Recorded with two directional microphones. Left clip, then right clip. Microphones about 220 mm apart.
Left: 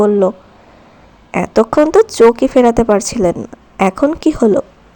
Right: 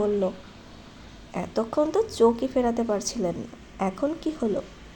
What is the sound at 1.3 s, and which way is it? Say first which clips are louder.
A woman's voice: left 15 dB; 35° left (ahead or behind).